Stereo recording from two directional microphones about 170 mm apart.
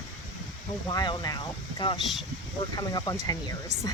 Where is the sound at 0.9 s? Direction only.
25° left (ahead or behind).